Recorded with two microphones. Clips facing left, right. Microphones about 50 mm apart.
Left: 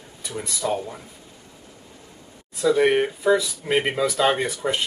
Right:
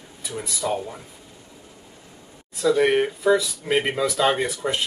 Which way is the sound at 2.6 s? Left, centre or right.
Centre.